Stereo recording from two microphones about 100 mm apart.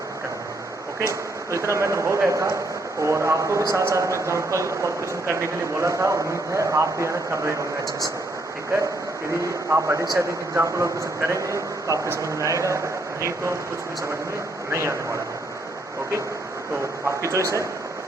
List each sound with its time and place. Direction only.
1.5 s a man's voice: 30° right (ahead or behind)
9.4 s a man's voice: 25° right (ahead or behind)
14.7 s a man's voice: 30° right (ahead or behind)
17.1 s speech: 30° right (ahead or behind)